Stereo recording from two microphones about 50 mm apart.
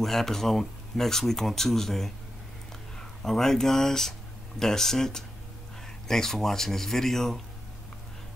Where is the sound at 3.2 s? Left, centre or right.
Centre.